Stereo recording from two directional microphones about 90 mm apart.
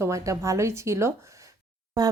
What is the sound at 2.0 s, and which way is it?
Speech, 45° right (ahead or behind).